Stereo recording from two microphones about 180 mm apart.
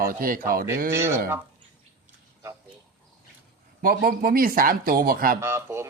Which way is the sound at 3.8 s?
55° right (ahead or behind).